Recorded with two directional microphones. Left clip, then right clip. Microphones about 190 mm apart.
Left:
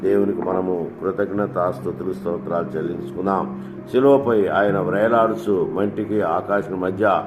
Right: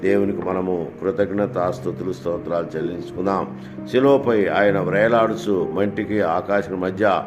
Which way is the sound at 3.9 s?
40° right (ahead or behind).